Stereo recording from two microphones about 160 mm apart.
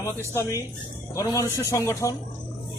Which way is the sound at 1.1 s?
20° left (ahead or behind).